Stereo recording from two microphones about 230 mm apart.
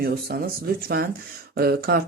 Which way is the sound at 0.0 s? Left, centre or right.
Right.